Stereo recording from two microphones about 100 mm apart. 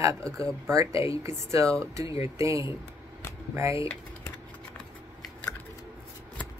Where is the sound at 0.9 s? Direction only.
65° left (ahead or behind).